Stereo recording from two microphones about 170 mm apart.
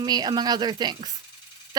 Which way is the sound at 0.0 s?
25° right (ahead or behind).